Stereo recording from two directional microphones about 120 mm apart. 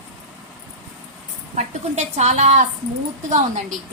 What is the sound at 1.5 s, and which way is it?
A woman's voice, 75° right (ahead or behind).